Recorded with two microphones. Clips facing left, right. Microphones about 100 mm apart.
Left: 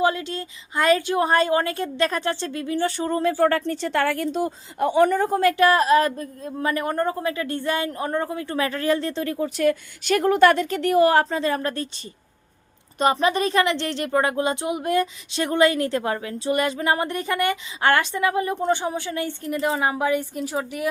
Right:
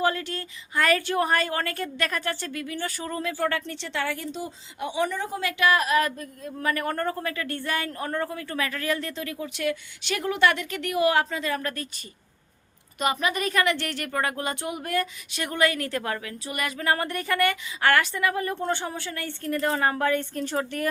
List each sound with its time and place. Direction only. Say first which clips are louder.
0.0 s a woman's voice: left 4 dB; 20° left (ahead or behind)
13.0 s speech: left 6 dB; 30° left (ahead or behind); by 20.8 s 5° left (ahead or behind)